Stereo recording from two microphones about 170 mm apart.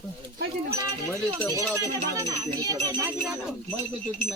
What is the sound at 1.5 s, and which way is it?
Speech, 20° right (ahead or behind).